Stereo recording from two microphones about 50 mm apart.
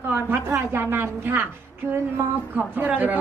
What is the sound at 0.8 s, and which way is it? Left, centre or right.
Speech, right.